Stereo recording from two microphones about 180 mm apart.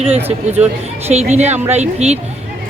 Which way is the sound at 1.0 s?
35° right (ahead or behind).